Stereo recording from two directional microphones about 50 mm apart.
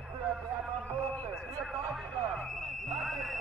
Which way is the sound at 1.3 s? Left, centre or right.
Centre.